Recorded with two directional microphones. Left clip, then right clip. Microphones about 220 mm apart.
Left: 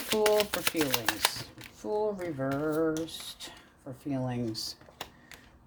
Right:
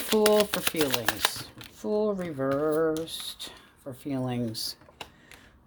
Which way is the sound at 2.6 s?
45° right (ahead or behind).